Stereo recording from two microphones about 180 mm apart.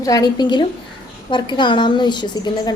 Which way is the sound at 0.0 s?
20° left (ahead or behind).